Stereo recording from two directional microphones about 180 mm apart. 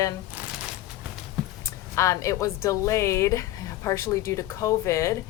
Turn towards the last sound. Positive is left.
turn(degrees=15)  # may be behind; listen again after turning